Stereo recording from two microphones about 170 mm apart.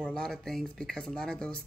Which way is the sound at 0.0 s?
5° left (ahead or behind).